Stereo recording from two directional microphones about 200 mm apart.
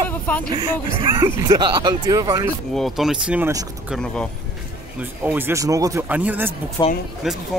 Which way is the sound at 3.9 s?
5° left (ahead or behind).